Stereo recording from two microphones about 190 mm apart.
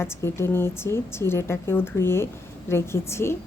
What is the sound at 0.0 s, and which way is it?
Speech, 15° left (ahead or behind).